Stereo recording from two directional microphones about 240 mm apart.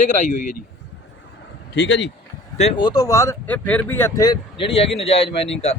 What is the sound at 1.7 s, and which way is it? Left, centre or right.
Speech, left.